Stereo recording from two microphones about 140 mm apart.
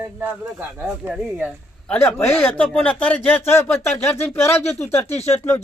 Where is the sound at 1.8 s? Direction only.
15° left (ahead or behind).